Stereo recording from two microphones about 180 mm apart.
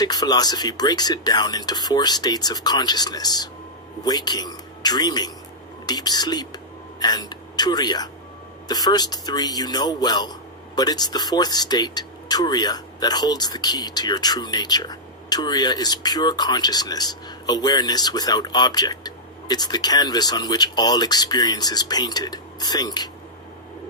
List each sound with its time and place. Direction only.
0.0 s speech: 20° left (ahead or behind)